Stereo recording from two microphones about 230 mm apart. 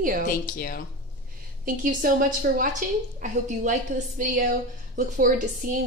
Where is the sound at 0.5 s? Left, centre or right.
Left.